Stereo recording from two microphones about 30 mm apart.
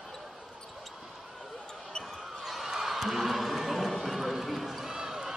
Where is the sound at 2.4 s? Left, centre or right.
Centre.